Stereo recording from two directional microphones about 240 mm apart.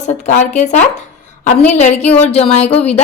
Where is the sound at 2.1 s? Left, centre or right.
Left.